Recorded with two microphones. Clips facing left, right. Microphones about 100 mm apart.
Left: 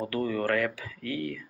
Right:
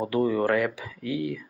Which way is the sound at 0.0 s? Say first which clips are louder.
Right 5 dB; 15° right (ahead or behind).